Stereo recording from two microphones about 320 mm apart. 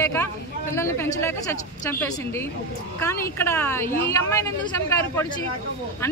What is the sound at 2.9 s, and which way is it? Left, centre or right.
A woman's voice, centre.